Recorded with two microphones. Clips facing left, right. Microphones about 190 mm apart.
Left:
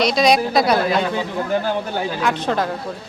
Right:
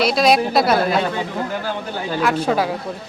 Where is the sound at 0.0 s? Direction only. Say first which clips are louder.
Even; 5° right (ahead or behind).